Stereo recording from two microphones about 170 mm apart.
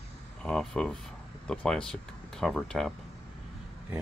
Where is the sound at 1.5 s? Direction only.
5° left (ahead or behind).